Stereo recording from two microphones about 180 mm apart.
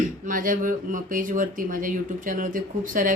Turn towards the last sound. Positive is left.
turn(degrees=-50)  # may be behind; listen again after turning